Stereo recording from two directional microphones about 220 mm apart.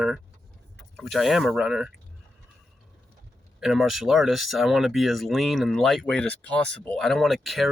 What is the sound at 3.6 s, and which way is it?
Speech, centre (ahead or behind).